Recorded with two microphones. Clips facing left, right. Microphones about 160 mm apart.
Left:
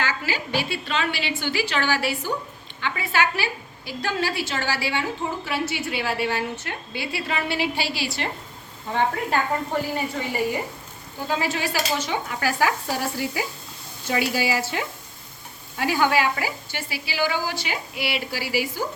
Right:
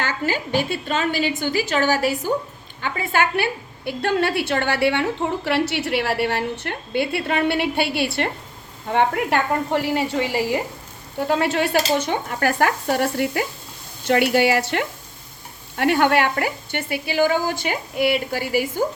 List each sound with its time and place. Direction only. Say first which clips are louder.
0.0 s a woman's voice: right 3 dB; 50° right (ahead or behind); by 10.6 s 75° right (ahead or behind)
11.2 s a woman's voice: right 6 dB; 65° right (ahead or behind)